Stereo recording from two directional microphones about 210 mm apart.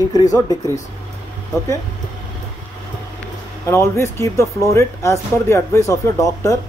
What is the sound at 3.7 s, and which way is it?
Speech, 10° left (ahead or behind).